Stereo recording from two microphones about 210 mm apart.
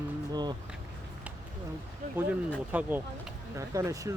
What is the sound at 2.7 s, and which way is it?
Speech, 10° right (ahead or behind).